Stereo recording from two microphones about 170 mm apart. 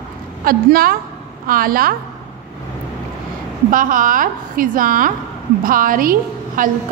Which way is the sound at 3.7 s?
50° right (ahead or behind).